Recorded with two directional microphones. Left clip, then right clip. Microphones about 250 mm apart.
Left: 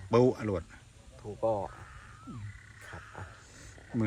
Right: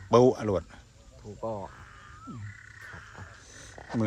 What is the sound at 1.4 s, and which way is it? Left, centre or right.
Speech, left.